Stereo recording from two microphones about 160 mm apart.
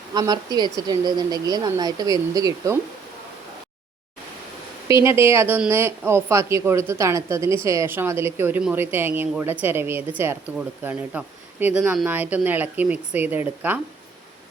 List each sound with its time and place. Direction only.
0.1 s a woman's voice: 25° right (ahead or behind)
4.9 s speech: 15° right (ahead or behind)